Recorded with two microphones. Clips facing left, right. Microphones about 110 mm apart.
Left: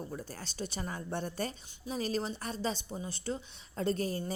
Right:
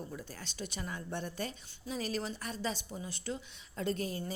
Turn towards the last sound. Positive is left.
turn(degrees=40)  # may be behind; listen again after turning